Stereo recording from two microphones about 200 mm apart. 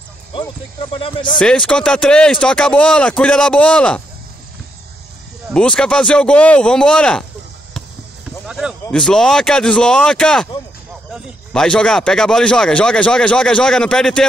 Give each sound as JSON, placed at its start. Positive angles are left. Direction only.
{"t": 0.3, "sound": "speech", "side_deg": 25}
{"t": 1.4, "sound": "speech", "side_deg": 5}
{"t": 5.5, "sound": "speech", "side_deg": 5}
{"t": 8.5, "sound": "a sound", "side_deg": -5}
{"t": 8.9, "sound": "speech", "side_deg": 5}